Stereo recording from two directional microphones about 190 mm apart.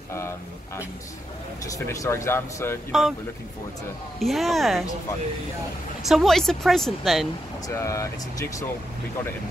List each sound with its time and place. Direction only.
0.1 s speech: 15° left (ahead or behind)
1.9 s speech: 15° left (ahead or behind)
2.9 s a woman's voice: centre (ahead or behind)
4.2 s a woman's voice: centre (ahead or behind)
6.0 s a woman's voice: centre (ahead or behind)
7.7 s speech: 15° left (ahead or behind)